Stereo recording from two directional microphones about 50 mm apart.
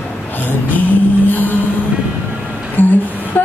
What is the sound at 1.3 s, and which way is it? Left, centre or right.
Music, left.